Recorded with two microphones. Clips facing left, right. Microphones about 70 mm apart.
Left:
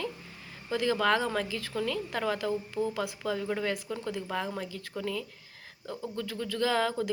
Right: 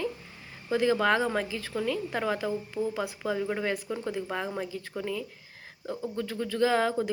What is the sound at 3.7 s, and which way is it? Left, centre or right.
Speech, right.